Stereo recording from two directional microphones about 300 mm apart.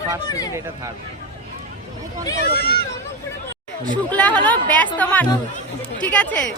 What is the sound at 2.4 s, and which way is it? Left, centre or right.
Speech, left.